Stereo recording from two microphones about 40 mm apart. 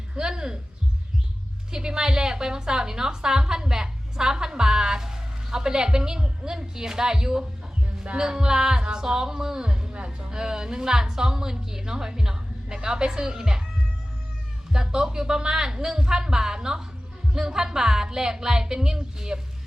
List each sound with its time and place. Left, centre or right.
0.1 s speech: centre
1.7 s a woman's voice: centre
14.7 s a woman's voice: centre